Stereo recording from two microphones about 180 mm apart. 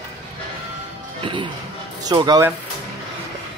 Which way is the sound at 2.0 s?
25° right (ahead or behind).